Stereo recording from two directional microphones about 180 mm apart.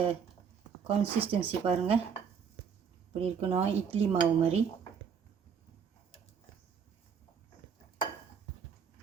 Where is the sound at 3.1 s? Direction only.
35° right (ahead or behind).